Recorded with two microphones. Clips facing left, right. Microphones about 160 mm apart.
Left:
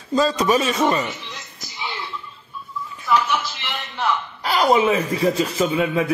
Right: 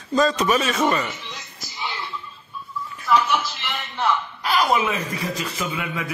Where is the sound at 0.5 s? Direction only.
35° left (ahead or behind).